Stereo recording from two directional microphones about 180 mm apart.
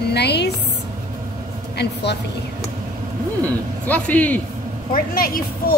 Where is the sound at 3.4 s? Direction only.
10° left (ahead or behind).